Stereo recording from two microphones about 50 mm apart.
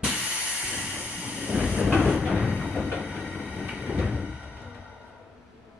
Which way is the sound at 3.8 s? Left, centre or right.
Right.